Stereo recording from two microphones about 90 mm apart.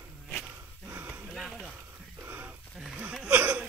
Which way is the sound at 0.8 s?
25° right (ahead or behind).